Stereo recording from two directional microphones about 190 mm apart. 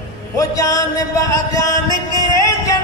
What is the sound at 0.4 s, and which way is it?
Music, 20° left (ahead or behind).